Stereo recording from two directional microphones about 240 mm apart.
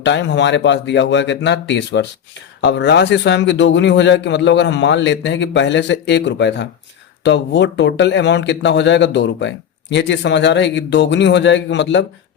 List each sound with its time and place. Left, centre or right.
0.0 s speech: left